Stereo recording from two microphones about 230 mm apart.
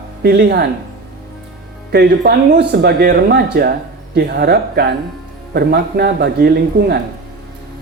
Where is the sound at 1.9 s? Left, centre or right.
Right.